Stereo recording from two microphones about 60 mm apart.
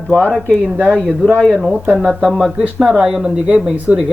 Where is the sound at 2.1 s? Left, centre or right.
Centre.